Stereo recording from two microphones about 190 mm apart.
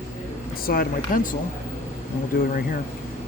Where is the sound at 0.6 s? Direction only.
50° left (ahead or behind).